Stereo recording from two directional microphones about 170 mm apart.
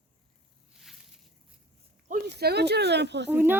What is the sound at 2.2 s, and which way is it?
Speech, 75° right (ahead or behind).